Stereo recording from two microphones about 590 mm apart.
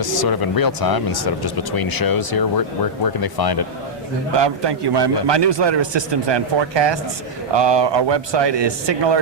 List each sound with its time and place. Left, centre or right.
0.0 s speech: left
4.4 s a man's voice: right